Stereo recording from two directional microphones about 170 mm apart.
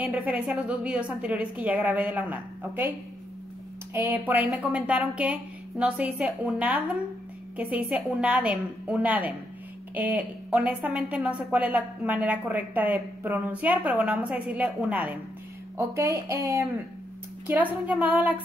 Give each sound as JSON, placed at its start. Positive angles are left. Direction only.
{"t": 0.0, "sound": "speech", "side_deg": -10}
{"t": 3.9, "sound": "speech", "side_deg": -10}